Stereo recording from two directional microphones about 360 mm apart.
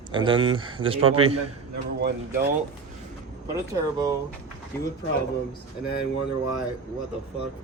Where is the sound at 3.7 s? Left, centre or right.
Centre.